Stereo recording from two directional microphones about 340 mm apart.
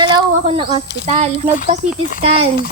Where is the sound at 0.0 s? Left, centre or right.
Centre.